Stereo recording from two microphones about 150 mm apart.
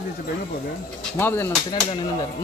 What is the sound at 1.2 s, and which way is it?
Speech, 15° left (ahead or behind).